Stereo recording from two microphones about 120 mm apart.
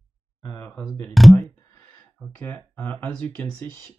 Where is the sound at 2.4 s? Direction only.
15° left (ahead or behind).